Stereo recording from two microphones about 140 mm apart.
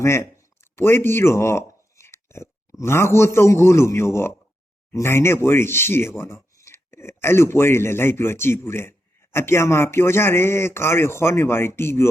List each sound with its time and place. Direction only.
0.0 s speech: 20° left (ahead or behind)